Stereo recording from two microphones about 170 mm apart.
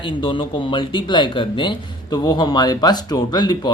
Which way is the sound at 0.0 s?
30° left (ahead or behind).